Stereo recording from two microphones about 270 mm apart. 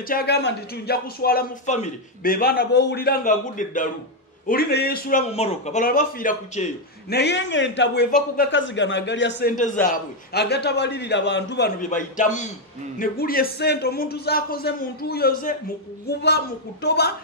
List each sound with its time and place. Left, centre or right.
0.0 s a man's voice: left